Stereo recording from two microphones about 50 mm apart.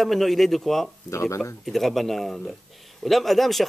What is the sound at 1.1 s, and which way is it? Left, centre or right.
Speech, left.